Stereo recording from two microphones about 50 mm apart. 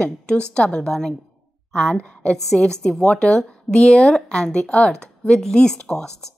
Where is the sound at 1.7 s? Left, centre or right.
Left.